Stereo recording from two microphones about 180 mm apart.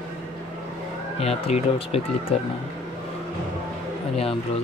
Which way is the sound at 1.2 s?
35° left (ahead or behind).